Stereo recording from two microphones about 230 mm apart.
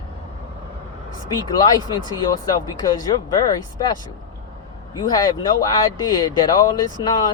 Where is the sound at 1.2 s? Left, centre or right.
Centre.